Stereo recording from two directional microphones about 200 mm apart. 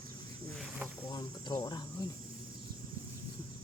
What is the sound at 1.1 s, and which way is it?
Speech, 20° left (ahead or behind).